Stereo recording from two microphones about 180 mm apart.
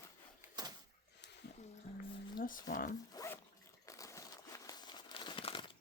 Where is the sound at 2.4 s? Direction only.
45° left (ahead or behind).